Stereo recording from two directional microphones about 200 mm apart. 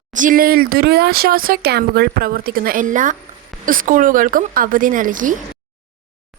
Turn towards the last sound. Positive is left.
turn(degrees=-40)  # may be behind; listen again after turning